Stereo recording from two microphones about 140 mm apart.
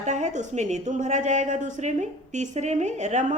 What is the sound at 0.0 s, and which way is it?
A woman's voice, 60° right (ahead or behind).